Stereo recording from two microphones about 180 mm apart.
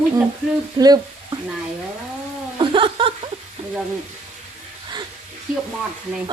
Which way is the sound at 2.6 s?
30° right (ahead or behind).